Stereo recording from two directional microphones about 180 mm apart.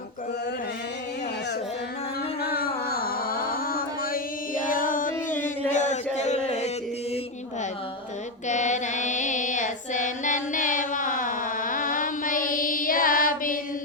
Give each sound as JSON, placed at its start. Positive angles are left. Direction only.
{"t": 2.4, "sound": "carnatic music", "side_deg": 60}
{"t": 4.6, "sound": "music", "side_deg": 50}
{"t": 5.7, "sound": "a sound", "side_deg": 40}
{"t": 8.4, "sound": "music", "side_deg": 40}